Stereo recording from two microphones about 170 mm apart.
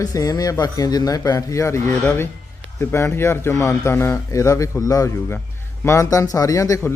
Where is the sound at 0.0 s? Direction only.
20° left (ahead or behind).